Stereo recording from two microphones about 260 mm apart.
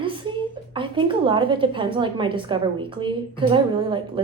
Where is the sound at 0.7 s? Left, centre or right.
Centre.